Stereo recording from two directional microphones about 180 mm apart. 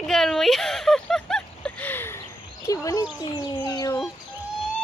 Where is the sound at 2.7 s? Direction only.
20° left (ahead or behind).